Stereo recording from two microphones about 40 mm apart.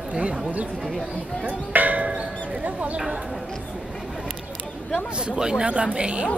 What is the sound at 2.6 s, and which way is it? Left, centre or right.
Speech, right.